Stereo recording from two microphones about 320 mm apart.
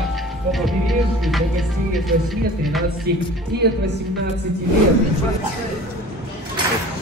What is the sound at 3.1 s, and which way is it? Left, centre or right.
Speech, right.